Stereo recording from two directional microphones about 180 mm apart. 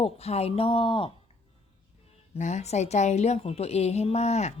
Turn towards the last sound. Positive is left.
turn(degrees=35)  # may be behind; listen again after turning